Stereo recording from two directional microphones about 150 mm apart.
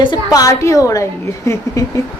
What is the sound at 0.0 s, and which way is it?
A woman's voice, 30° left (ahead or behind).